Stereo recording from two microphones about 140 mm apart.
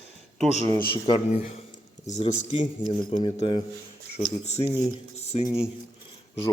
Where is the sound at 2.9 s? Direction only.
35° left (ahead or behind).